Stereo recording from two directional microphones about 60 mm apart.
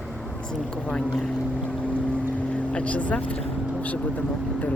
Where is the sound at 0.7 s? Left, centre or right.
Centre.